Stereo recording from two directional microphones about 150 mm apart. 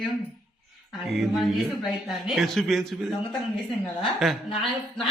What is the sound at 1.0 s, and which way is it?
A man's voice, centre (ahead or behind).